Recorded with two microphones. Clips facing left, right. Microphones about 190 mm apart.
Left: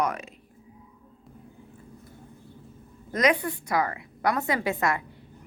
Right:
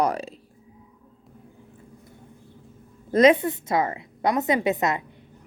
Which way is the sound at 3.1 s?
25° right (ahead or behind).